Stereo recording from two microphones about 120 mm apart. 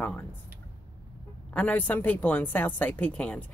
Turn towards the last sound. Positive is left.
turn(degrees=10)  # may be behind; listen again after turning